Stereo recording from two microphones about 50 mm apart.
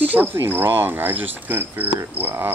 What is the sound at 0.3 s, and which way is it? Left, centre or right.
Cricket, right.